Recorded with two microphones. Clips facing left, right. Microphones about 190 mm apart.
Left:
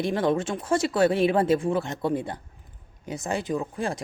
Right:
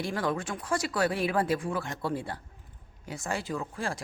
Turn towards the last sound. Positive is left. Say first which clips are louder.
# left 5 dB
turn(degrees=20)  # may be behind; listen again after turning